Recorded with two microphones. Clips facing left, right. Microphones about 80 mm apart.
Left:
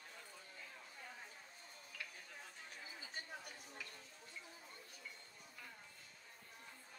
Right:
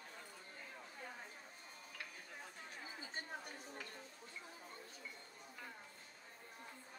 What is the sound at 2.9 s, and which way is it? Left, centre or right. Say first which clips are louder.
Chatter: right 3 dB; right.